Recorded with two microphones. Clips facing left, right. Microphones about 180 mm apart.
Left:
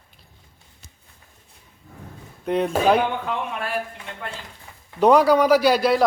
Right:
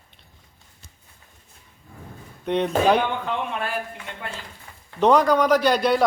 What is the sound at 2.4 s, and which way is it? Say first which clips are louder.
A woman's voice: even; 5° left (ahead or behind).